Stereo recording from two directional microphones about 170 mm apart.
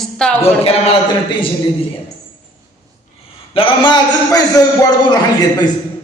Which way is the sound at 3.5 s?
30° left (ahead or behind).